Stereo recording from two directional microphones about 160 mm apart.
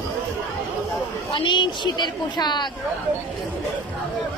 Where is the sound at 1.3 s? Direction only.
30° left (ahead or behind).